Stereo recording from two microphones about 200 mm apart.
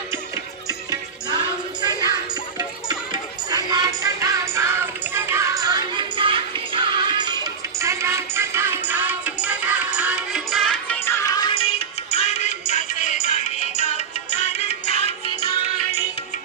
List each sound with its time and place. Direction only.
0.7 s music: 20° right (ahead or behind); by 11.7 s 25° left (ahead or behind)
12.1 s music: 35° left (ahead or behind)